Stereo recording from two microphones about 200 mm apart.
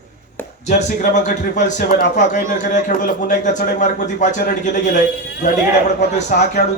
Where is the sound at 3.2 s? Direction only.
40° left (ahead or behind).